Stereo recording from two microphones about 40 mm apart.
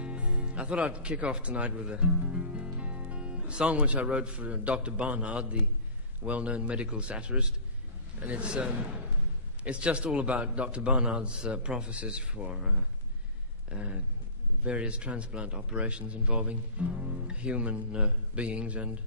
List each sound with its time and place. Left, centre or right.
0.0 s a man's voice: right